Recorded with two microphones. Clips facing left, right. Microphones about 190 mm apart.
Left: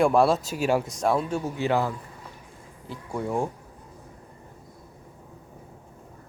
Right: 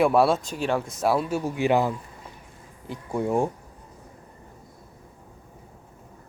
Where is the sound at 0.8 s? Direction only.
5° right (ahead or behind); by 3.5 s 20° right (ahead or behind).